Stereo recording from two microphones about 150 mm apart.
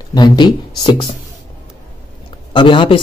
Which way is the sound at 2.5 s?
35° left (ahead or behind).